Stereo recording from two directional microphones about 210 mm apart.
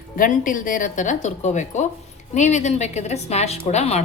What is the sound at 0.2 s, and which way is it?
A woman's voice, 40° left (ahead or behind).